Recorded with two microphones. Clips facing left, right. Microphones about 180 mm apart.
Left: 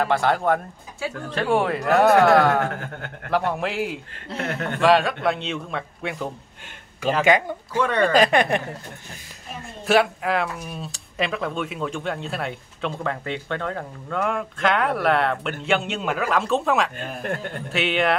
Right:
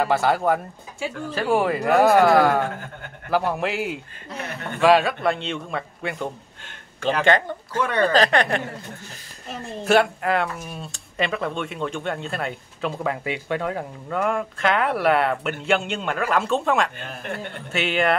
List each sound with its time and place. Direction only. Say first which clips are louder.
0.0 s speech: right 1 dB; 5° right (ahead or behind)
2.7 s speech: left 3 dB; 80° left
3.3 s speech: right 1 dB; centre (ahead or behind)
4.4 s speech: left 6 dB; 90° left
4.7 s speech: right 1 dB; centre (ahead or behind); by 8.6 s 15° left (ahead or behind)
9.8 s speech: right 1 dB; centre (ahead or behind)